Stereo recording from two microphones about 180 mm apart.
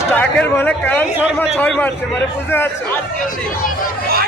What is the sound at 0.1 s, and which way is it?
Speech, 10° left (ahead or behind).